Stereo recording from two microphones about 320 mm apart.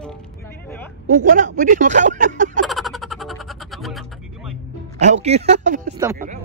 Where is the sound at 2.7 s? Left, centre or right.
Centre.